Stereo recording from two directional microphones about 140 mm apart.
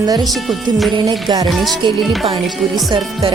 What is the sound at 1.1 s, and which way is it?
Speech, 30° right (ahead or behind).